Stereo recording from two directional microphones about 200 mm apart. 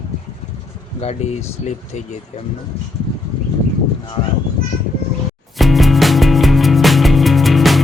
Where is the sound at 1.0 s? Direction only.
35° left (ahead or behind).